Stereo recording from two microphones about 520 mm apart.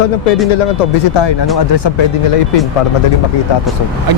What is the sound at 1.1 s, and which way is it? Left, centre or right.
Speech, left.